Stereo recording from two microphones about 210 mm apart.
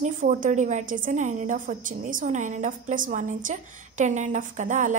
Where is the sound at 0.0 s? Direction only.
40° right (ahead or behind).